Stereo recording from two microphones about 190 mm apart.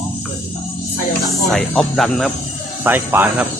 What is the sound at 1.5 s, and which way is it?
Speech, centre (ahead or behind).